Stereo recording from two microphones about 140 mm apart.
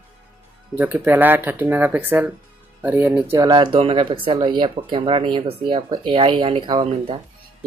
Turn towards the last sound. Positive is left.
turn(degrees=-40)  # may be behind; listen again after turning